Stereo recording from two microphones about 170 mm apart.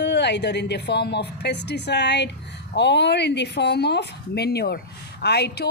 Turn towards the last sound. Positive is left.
turn(degrees=75)  # may be behind; listen again after turning